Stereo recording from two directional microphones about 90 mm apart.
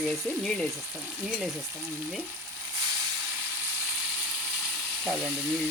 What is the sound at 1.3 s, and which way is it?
Speech, centre (ahead or behind).